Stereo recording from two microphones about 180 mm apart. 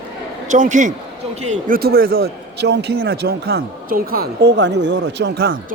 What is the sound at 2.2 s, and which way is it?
A man's voice, 70° right (ahead or behind).